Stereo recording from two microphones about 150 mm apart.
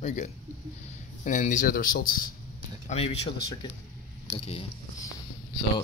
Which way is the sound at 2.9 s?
40° left (ahead or behind).